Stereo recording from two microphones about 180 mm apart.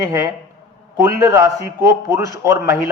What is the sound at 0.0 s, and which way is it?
A man's voice, 15° right (ahead or behind).